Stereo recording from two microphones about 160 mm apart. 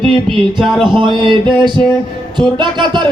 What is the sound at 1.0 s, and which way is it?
Music, 30° right (ahead or behind).